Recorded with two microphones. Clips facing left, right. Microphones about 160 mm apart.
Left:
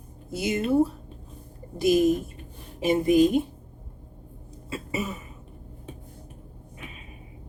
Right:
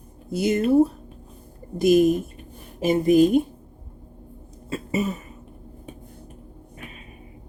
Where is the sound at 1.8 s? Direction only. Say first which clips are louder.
Right 4 dB; 50° right (ahead or behind).